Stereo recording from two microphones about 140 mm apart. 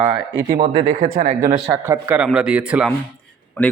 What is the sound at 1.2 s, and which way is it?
Speech, 70° right (ahead or behind).